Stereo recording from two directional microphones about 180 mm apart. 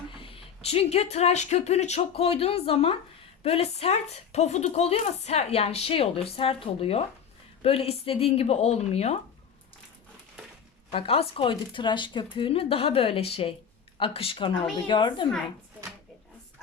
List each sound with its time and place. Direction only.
0.1 s a woman's voice: 30° left (ahead or behind)
10.9 s a woman's voice: 30° left (ahead or behind)